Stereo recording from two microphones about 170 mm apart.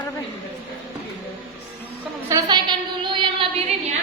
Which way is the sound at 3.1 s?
30° right (ahead or behind).